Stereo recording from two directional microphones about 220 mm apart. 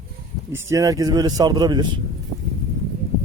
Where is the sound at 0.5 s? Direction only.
15° right (ahead or behind).